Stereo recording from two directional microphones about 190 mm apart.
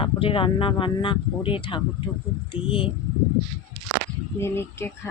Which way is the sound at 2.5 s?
30° left (ahead or behind).